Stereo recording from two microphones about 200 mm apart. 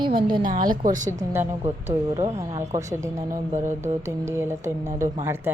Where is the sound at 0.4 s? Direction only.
45° right (ahead or behind).